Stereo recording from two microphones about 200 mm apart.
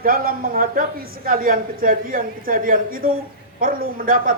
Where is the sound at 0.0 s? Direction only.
45° right (ahead or behind).